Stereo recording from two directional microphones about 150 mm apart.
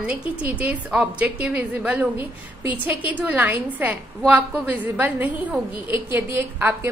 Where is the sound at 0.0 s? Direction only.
10° right (ahead or behind).